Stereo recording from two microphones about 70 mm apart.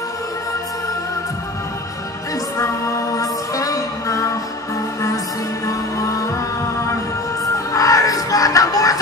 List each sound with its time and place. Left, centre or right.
2.6 s music: left
5.7 s music: left
7.5 s music: left